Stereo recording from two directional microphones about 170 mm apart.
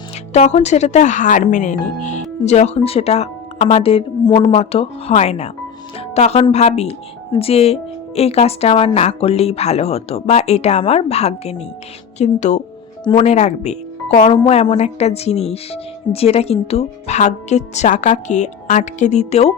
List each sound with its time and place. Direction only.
0.3 s speech: 40° left (ahead or behind)
6.0 s music: 40° left (ahead or behind)
6.4 s speech: 40° left (ahead or behind)